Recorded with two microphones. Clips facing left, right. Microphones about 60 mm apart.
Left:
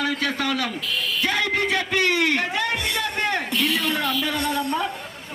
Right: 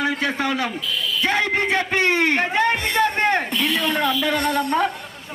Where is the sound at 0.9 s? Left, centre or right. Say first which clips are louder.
Right 1 dB; left.